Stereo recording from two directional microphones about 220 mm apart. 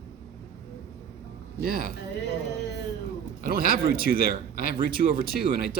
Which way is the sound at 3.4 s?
40° right (ahead or behind).